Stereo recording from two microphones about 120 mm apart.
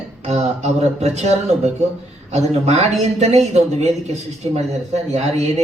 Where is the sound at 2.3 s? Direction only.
65° right (ahead or behind).